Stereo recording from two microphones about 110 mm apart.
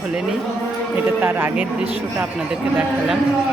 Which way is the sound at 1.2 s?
20° right (ahead or behind).